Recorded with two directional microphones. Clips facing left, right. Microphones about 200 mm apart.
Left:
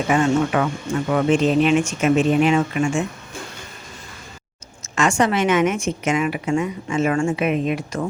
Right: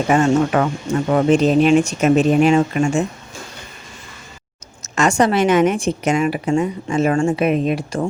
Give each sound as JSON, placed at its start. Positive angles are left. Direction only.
{"t": 0.1, "sound": "a woman's voice", "side_deg": -45}
{"t": 4.8, "sound": "a woman's voice", "side_deg": -40}